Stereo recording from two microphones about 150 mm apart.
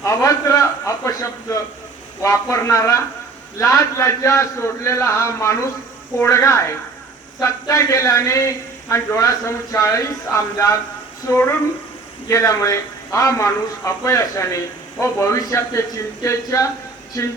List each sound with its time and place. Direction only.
0.0 s speech: 20° left (ahead or behind)